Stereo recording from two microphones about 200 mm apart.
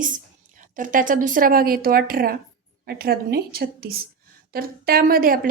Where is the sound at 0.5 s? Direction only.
40° right (ahead or behind).